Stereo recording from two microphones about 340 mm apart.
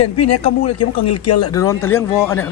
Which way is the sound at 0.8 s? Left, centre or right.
Left.